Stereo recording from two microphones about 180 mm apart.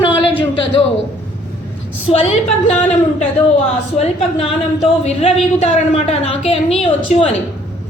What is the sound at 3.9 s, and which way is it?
A woman's voice, 35° left (ahead or behind).